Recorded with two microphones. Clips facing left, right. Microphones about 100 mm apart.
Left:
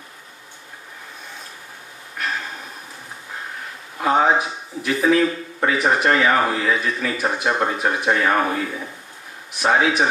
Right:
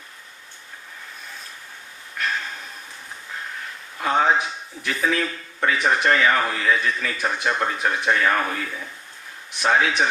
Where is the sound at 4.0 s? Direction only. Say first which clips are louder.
Left 3 dB; 30° left (ahead or behind).